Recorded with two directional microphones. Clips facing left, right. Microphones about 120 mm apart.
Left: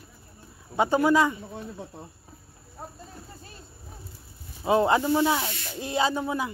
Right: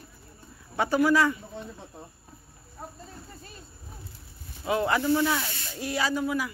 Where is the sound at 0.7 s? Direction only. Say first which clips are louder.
Left 2 dB; 20° left (ahead or behind).